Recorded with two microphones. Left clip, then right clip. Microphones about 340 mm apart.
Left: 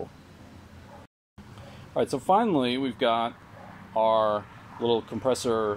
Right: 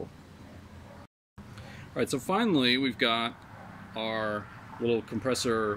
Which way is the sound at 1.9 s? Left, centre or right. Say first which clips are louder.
Left 6 dB; centre.